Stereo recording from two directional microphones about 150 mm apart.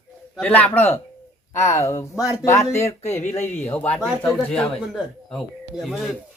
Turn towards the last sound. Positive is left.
turn(degrees=0)  # may be behind; listen again after turning